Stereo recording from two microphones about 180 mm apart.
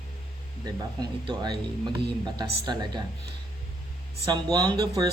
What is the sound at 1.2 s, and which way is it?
Speech, 25° right (ahead or behind).